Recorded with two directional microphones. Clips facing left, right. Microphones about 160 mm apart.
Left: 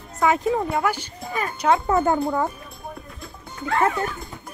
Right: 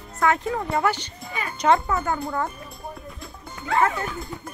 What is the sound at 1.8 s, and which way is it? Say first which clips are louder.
Speech: left 6 dB; 30° left (ahead or behind).